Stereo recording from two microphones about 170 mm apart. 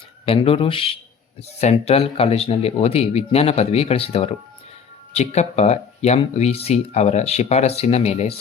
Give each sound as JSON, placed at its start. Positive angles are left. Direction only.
{"t": 0.3, "sound": "speech", "side_deg": 35}